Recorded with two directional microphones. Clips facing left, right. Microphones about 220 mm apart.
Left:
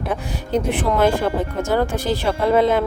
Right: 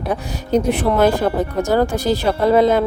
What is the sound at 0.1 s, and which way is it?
Speech, 40° right (ahead or behind).